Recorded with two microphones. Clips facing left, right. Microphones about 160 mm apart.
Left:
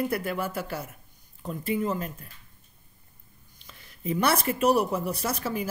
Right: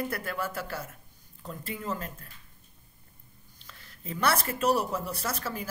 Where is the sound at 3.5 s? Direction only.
15° left (ahead or behind).